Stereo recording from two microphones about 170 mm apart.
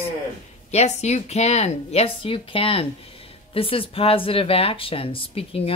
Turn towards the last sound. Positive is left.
turn(degrees=35)  # may be behind; listen again after turning